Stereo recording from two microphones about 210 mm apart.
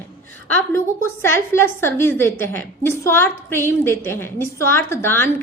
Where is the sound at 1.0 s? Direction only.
10° left (ahead or behind).